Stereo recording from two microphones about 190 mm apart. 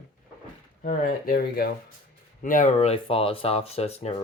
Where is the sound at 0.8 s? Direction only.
45° left (ahead or behind).